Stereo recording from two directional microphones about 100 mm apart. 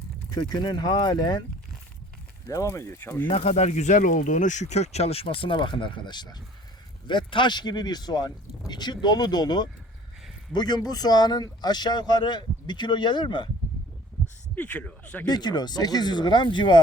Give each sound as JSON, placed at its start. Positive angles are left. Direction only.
{"t": 0.3, "sound": "speech", "side_deg": 40}
{"t": 2.5, "sound": "speech", "side_deg": 30}
{"t": 3.2, "sound": "speech", "side_deg": 90}
{"t": 4.7, "sound": "speech", "side_deg": 90}
{"t": 14.5, "sound": "speech", "side_deg": 15}
{"t": 15.3, "sound": "speech", "side_deg": 45}